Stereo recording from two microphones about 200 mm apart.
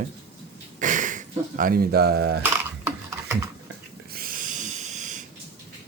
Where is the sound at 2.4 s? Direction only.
10° right (ahead or behind).